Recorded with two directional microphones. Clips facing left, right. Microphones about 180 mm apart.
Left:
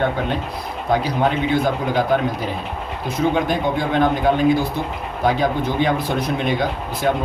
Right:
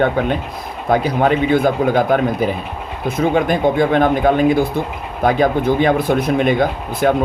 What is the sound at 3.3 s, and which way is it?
Speech, 55° right (ahead or behind).